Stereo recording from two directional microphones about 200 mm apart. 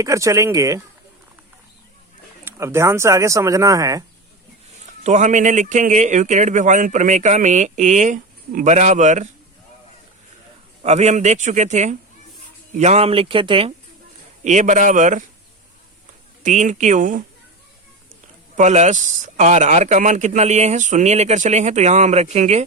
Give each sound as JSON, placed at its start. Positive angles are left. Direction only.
{"t": 0.0, "sound": "speech", "side_deg": -15}
{"t": 2.4, "sound": "speech", "side_deg": -10}
{"t": 5.0, "sound": "speech", "side_deg": -35}
{"t": 10.8, "sound": "a man's voice", "side_deg": -35}
{"t": 14.4, "sound": "speech", "side_deg": -35}
{"t": 16.4, "sound": "speech", "side_deg": -40}
{"t": 18.5, "sound": "speech", "side_deg": -35}